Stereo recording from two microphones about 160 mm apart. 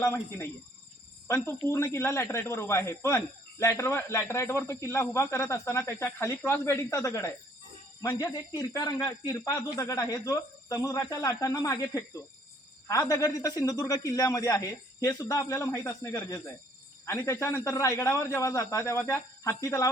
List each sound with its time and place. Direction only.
0.0 s speech: 15° left (ahead or behind)
1.6 s speech: 15° left (ahead or behind)